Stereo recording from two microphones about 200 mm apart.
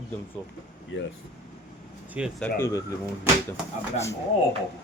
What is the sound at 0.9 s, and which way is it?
Speech, 70° left (ahead or behind).